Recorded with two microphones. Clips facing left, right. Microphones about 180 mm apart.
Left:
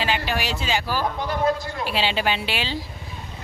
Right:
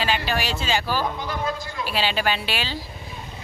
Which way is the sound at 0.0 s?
15° left (ahead or behind).